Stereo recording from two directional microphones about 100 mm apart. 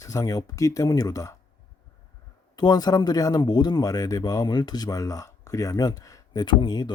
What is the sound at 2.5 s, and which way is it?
Speech, 40° left (ahead or behind).